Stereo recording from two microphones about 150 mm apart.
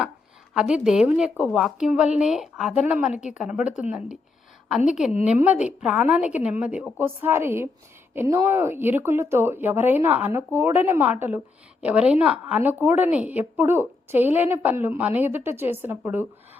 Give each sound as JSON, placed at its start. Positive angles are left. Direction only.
{"t": 0.5, "sound": "a woman's voice", "side_deg": -5}